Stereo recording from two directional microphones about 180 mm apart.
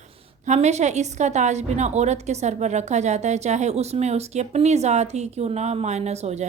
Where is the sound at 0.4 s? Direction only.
40° right (ahead or behind).